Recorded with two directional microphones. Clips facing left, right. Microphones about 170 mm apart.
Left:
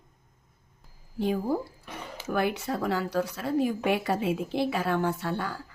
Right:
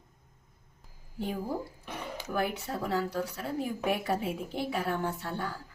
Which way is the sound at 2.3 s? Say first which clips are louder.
Left 5 dB; 80° left.